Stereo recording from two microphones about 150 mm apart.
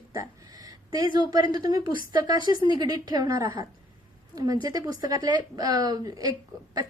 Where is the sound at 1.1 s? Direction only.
25° right (ahead or behind).